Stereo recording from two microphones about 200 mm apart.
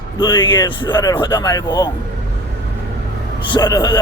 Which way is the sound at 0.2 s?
25° left (ahead or behind).